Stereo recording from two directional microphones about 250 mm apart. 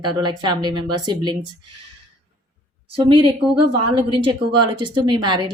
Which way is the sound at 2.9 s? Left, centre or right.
Centre.